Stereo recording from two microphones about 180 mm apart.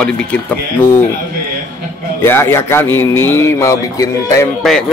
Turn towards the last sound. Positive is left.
turn(degrees=0)  # may be behind; listen again after turning